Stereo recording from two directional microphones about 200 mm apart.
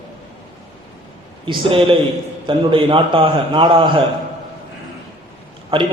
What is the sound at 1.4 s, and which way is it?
A man's voice, 25° right (ahead or behind).